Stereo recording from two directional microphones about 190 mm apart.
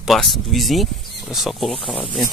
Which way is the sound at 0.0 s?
Centre (ahead or behind).